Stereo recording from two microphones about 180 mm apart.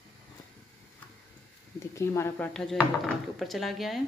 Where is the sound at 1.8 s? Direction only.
15° left (ahead or behind); by 4.0 s centre (ahead or behind).